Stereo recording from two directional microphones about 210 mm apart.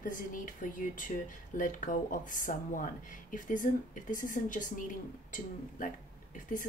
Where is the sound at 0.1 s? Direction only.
40° left (ahead or behind).